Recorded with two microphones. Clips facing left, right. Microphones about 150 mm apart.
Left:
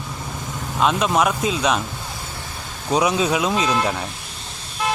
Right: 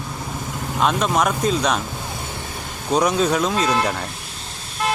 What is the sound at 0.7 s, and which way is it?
Speech, 5° left (ahead or behind).